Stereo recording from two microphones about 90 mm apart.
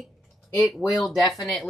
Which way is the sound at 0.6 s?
Centre (ahead or behind).